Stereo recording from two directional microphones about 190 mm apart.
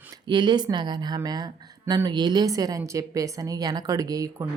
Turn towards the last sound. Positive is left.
turn(degrees=-20)  # may be behind; listen again after turning